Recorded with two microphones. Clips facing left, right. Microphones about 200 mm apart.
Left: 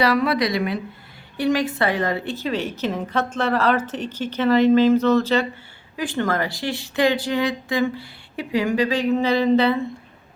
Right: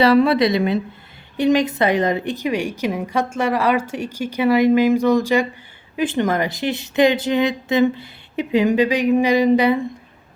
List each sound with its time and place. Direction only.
0.0 s a woman's voice: 25° right (ahead or behind)